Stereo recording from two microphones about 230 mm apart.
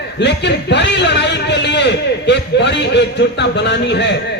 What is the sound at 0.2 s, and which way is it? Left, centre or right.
A man's voice, left.